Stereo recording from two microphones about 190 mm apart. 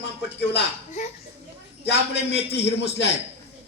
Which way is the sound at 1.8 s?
60° left (ahead or behind).